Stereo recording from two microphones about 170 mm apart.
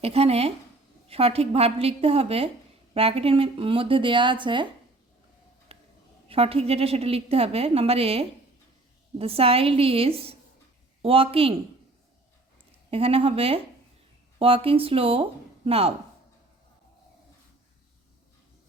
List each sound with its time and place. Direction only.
0.0 s a woman's voice: 35° right (ahead or behind)
5.7 s a sound: 35° right (ahead or behind)
6.2 s a woman's voice: 35° right (ahead or behind)
12.9 s a woman's voice: 35° right (ahead or behind)